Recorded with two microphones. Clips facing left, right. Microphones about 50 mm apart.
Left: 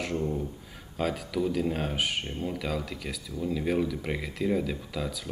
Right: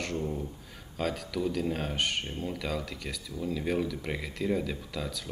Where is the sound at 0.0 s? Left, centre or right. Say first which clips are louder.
Left 3 dB; centre.